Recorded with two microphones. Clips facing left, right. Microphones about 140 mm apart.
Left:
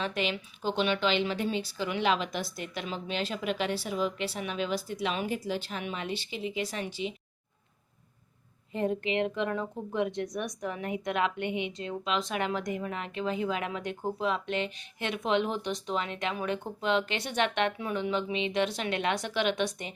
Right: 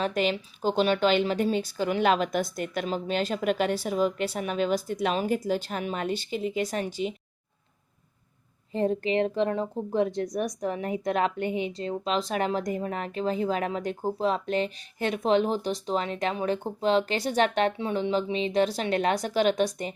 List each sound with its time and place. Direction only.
0.0 s a woman's voice: 40° right (ahead or behind)
8.7 s speech: 35° right (ahead or behind)